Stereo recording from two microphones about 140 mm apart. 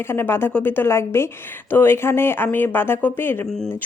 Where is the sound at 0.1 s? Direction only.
15° left (ahead or behind).